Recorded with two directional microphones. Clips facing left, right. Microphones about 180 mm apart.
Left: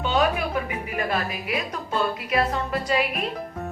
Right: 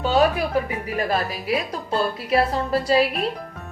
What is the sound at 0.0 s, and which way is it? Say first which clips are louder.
Speech: right 4 dB; 35° right (ahead or behind).